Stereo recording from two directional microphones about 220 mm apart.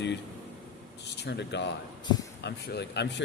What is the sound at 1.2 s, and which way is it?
Speech, 50° left (ahead or behind).